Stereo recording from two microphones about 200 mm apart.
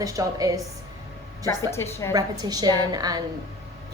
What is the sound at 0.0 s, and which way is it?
Speech, 15° right (ahead or behind).